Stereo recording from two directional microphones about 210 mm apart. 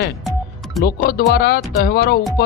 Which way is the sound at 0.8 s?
45° left (ahead or behind).